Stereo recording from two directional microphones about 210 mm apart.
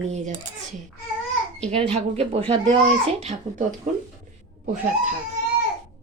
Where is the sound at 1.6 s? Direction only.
30° right (ahead or behind).